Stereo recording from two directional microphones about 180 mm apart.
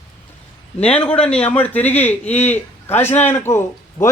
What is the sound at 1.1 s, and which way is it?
A man's voice, 5° left (ahead or behind).